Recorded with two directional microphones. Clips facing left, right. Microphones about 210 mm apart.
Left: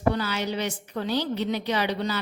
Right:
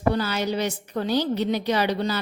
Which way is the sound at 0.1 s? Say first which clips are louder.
Right 3 dB; 40° right (ahead or behind).